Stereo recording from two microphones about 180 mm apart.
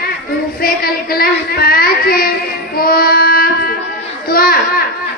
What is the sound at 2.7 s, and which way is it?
Child singing, 55° left (ahead or behind).